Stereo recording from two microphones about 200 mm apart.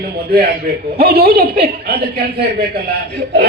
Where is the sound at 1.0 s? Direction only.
50° right (ahead or behind).